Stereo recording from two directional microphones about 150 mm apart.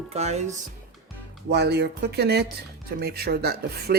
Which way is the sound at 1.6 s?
90° right.